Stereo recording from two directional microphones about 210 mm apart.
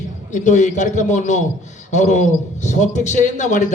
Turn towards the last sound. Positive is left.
turn(degrees=35)  # may be behind; listen again after turning